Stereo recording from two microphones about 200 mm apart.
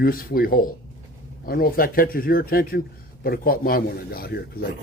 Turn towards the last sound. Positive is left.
turn(degrees=50)  # may be behind; listen again after turning